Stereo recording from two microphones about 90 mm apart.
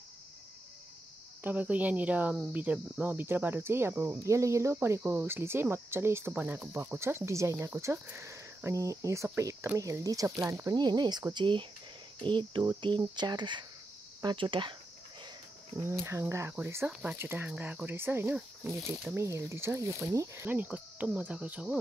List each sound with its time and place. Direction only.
1.4 s cricket: 20° right (ahead or behind)
2.4 s speech: 15° right (ahead or behind)
8.3 s speech: 30° right (ahead or behind)
10.7 s speech: 50° right (ahead or behind)
11.3 s speech: 60° right (ahead or behind)
15.7 s speech: 25° right (ahead or behind)
20.4 s cricket: 20° right (ahead or behind)